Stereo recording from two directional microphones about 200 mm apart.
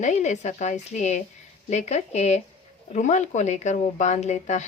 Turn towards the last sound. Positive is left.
turn(degrees=35)  # may be behind; listen again after turning